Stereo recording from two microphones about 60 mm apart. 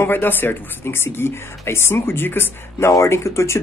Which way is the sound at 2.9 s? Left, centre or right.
Left.